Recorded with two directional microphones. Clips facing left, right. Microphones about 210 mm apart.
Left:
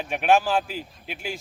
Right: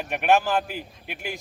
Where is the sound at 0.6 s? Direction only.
55° right (ahead or behind).